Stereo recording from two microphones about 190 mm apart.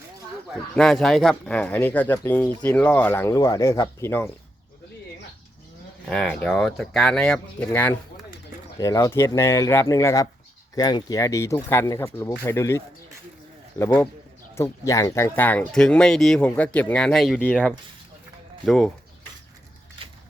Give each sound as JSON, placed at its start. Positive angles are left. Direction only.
{"t": 0.7, "sound": "speech", "side_deg": 5}
{"t": 6.1, "sound": "speech", "side_deg": 5}